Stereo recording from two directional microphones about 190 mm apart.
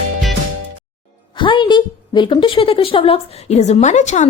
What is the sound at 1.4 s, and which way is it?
A woman's voice, 25° left (ahead or behind).